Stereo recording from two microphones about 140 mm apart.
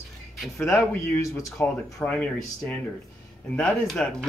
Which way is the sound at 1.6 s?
10° left (ahead or behind).